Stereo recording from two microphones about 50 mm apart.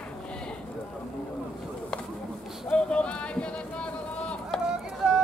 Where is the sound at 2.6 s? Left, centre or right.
Left.